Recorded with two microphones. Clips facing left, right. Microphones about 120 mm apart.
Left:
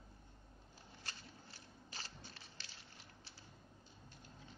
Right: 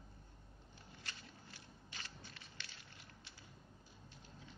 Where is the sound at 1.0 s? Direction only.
35° left (ahead or behind).